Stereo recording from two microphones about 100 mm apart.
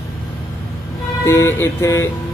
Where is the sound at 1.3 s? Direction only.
30° left (ahead or behind).